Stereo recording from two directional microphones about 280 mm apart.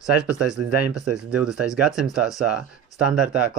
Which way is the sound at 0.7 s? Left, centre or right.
Right.